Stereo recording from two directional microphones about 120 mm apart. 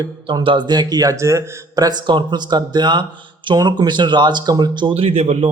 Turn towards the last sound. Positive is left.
turn(degrees=-60)  # may be behind; listen again after turning